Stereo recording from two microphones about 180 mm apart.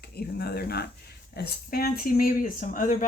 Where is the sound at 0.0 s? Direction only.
65° left (ahead or behind).